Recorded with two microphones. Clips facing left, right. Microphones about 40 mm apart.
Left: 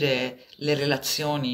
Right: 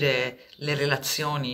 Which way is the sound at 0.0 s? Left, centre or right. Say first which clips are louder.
Even; centre.